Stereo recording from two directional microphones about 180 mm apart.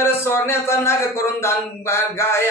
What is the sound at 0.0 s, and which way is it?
Speech, 15° left (ahead or behind).